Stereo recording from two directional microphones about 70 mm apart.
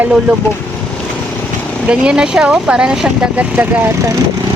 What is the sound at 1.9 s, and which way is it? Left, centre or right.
Speech, centre.